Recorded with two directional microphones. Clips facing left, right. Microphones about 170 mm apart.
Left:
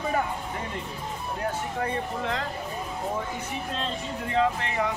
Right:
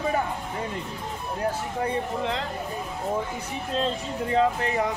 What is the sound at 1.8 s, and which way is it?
Speech, 25° right (ahead or behind).